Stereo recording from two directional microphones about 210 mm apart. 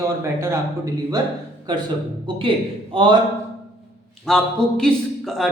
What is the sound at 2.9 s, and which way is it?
Speech, 25° right (ahead or behind).